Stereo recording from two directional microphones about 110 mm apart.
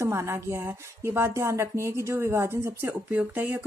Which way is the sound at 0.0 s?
25° right (ahead or behind).